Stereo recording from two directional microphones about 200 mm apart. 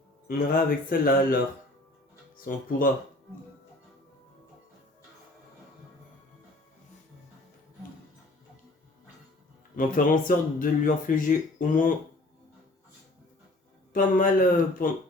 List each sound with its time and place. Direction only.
0.3 s speech: 45° left (ahead or behind)
2.4 s speech: 45° left (ahead or behind)
9.7 s speech: 45° left (ahead or behind)
13.9 s speech: 45° left (ahead or behind)